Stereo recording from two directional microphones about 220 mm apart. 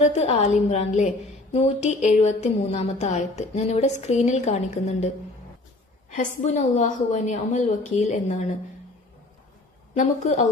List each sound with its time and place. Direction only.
0.0 s speech: 30° left (ahead or behind)
6.1 s speech: 35° left (ahead or behind)
9.9 s speech: 35° left (ahead or behind)